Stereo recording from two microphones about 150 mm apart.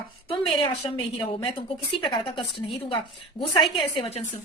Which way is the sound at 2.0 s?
35° left (ahead or behind).